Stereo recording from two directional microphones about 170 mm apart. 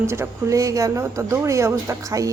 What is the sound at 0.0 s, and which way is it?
A woman's voice, 15° right (ahead or behind).